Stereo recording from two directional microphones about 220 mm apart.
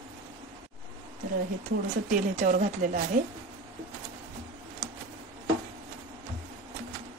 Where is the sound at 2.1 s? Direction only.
35° right (ahead or behind).